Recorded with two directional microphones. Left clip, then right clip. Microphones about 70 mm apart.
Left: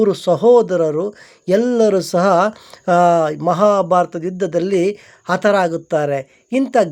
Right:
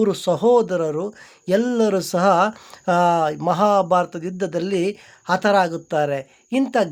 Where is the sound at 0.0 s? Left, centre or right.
Centre.